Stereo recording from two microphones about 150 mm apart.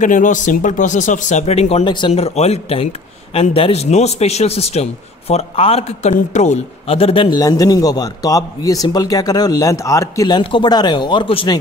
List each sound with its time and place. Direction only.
0.0 s speech: 60° left (ahead or behind)
1.9 s a man's voice: 30° left (ahead or behind)